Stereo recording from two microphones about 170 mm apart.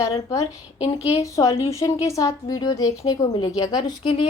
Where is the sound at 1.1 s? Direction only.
20° left (ahead or behind).